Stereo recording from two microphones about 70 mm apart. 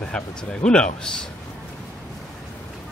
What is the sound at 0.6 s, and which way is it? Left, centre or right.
Speech, centre.